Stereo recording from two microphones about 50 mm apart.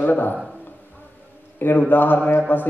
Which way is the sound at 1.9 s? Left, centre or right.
Left.